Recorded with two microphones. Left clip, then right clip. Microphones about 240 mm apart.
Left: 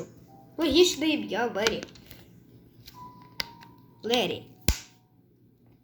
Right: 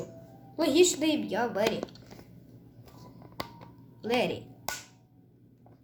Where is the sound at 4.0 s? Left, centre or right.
Centre.